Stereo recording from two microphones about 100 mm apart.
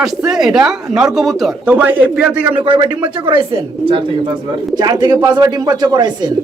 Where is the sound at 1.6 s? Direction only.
15° right (ahead or behind).